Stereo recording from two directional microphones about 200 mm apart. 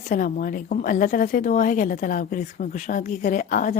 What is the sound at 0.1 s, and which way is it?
A woman's voice, 45° left (ahead or behind).